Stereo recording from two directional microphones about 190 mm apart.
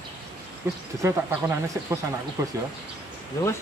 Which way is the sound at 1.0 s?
15° right (ahead or behind).